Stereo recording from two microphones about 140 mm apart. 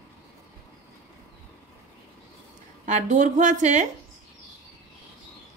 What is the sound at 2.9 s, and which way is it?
A woman's voice, 60° right (ahead or behind).